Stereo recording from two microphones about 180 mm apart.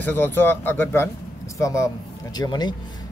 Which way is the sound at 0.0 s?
10° left (ahead or behind).